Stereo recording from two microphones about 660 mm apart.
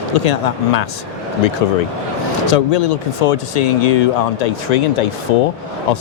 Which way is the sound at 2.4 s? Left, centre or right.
Left.